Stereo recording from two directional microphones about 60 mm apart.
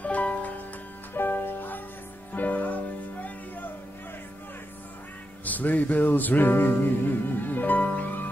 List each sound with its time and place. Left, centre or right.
0.0 s music: left
1.1 s music: left
5.4 s music: left